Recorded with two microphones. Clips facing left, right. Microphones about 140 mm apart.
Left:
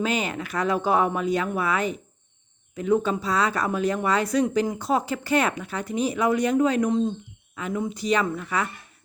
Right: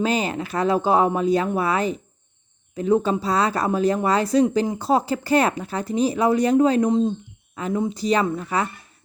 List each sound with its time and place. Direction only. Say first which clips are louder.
0.0 s speech: right 4 dB; 35° right (ahead or behind)